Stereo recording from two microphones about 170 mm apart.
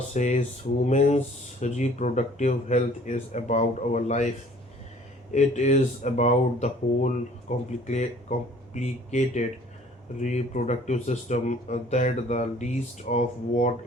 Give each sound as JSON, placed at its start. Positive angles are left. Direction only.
{"t": 0.1, "sound": "speech", "side_deg": 45}
{"t": 5.3, "sound": "speech", "side_deg": 45}